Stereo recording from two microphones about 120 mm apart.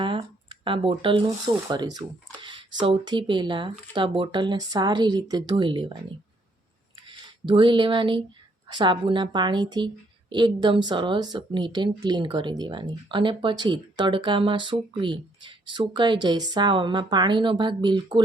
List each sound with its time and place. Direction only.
0.0 s a woman's voice: 45° right (ahead or behind)
7.1 s a woman's voice: 40° right (ahead or behind)